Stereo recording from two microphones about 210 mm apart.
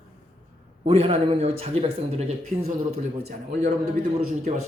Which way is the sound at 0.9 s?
25° right (ahead or behind).